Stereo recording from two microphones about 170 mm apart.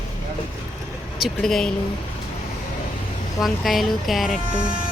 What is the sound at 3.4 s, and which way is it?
A woman's voice, centre (ahead or behind).